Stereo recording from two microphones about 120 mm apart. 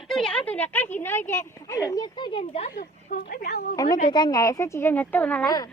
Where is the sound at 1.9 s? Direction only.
35° left (ahead or behind).